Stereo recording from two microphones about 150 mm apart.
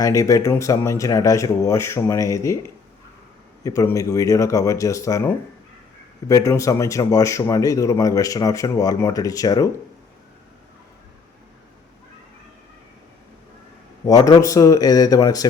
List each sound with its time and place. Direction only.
0.0 s speech: 20° left (ahead or behind)
14.0 s speech: 25° left (ahead or behind)